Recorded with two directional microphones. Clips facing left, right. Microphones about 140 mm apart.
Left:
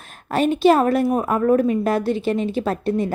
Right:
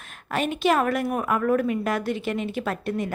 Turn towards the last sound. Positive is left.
turn(degrees=30)  # may be behind; listen again after turning